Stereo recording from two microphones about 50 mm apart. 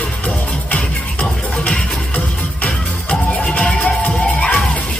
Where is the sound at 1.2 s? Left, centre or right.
Left.